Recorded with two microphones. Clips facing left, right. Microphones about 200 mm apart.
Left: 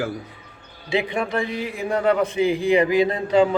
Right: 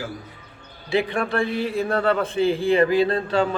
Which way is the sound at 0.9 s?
20° left (ahead or behind).